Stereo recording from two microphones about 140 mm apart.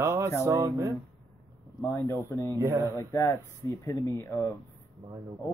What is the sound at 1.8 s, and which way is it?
Speech, 20° left (ahead or behind).